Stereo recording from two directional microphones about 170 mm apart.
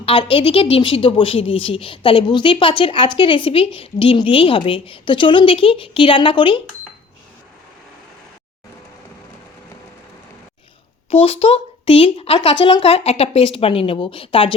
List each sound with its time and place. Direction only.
0.0 s a woman's voice: 30° left (ahead or behind)
11.1 s a woman's voice: 35° left (ahead or behind)